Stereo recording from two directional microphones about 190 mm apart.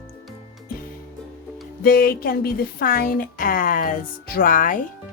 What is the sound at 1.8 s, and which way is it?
A woman's voice, 50° left (ahead or behind).